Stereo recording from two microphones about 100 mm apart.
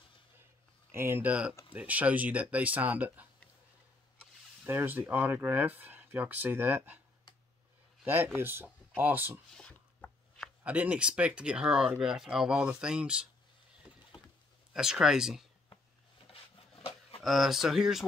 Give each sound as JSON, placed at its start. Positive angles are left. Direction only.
{"t": 0.9, "sound": "speech", "side_deg": -25}
{"t": 4.6, "sound": "speech", "side_deg": -20}
{"t": 8.0, "sound": "speech", "side_deg": -20}
{"t": 9.6, "sound": "a sound", "side_deg": 10}
{"t": 10.6, "sound": "speech", "side_deg": -15}
{"t": 14.7, "sound": "speech", "side_deg": -5}
{"t": 16.3, "sound": "wood", "side_deg": 70}
{"t": 17.2, "sound": "speech", "side_deg": 0}